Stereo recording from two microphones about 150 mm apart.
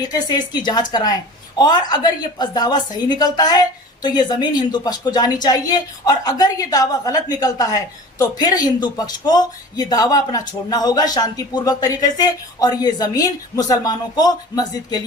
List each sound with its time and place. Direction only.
0.1 s speech: 30° left (ahead or behind)